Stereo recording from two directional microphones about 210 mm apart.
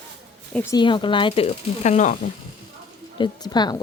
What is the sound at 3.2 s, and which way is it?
Speech, 20° left (ahead or behind).